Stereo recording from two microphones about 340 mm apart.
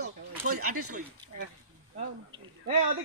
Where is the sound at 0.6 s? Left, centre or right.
Right.